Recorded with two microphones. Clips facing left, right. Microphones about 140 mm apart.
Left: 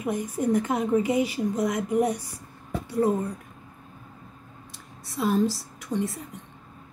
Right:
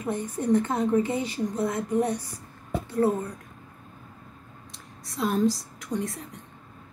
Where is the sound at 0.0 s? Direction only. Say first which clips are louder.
Left 2 dB; 10° left (ahead or behind).